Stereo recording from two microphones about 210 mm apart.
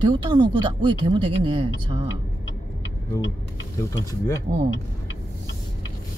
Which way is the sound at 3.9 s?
15° left (ahead or behind).